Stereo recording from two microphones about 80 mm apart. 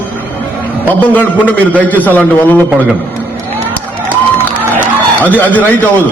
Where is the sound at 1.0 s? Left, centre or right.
Left.